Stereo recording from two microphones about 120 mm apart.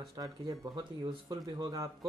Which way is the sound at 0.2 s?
35° right (ahead or behind).